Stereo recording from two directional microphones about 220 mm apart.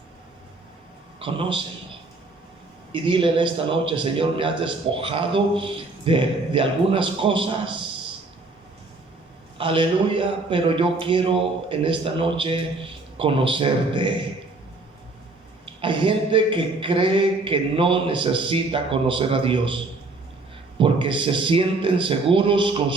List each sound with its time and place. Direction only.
1.2 s a man's voice: 25° right (ahead or behind)
2.9 s a man's voice: 25° right (ahead or behind)
9.6 s a man's voice: 25° right (ahead or behind)
15.6 s a man's voice: 20° right (ahead or behind)